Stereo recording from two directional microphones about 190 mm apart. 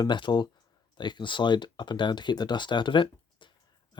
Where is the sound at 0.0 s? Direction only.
25° left (ahead or behind).